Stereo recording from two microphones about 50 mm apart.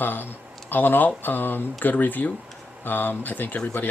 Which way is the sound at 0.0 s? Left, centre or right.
Left.